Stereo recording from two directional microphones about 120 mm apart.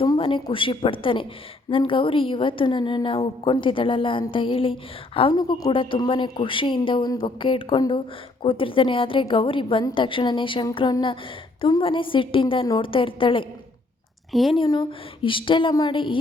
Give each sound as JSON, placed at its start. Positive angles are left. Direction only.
{"t": 0.0, "sound": "a woman's voice", "side_deg": 45}
{"t": 5.3, "sound": "a woman's voice", "side_deg": 35}
{"t": 5.7, "sound": "a woman's voice", "side_deg": 45}
{"t": 11.8, "sound": "a woman's voice", "side_deg": 45}
{"t": 14.5, "sound": "a woman's voice", "side_deg": 40}